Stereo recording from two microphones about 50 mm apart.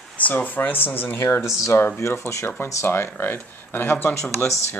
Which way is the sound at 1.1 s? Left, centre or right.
Left.